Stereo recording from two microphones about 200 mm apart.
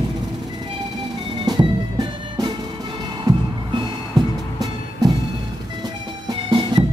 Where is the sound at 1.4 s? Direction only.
20° right (ahead or behind).